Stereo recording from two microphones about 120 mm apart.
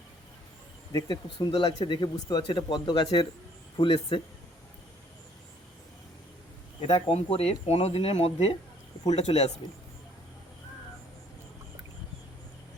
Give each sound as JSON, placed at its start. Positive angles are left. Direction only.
{"t": 0.9, "sound": "speech", "side_deg": 35}
{"t": 6.8, "sound": "speech", "side_deg": 50}